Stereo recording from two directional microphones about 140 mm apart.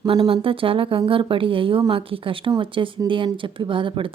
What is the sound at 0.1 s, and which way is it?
Speech, 40° right (ahead or behind).